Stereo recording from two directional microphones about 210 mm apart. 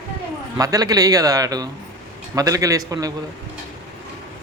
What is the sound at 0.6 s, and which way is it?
Speech, 15° right (ahead or behind).